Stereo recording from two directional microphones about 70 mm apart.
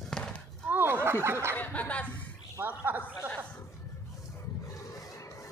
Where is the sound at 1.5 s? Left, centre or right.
Left.